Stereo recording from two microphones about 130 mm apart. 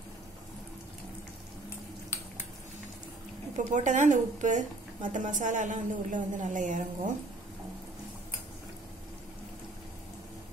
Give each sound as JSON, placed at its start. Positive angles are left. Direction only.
{"t": 3.5, "sound": "a woman's voice", "side_deg": -75}